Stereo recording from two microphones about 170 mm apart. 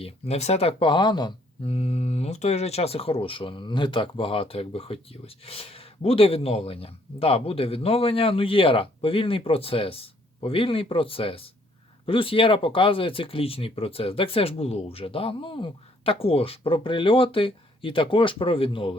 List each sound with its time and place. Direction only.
0.0 s speech: 40° left (ahead or behind)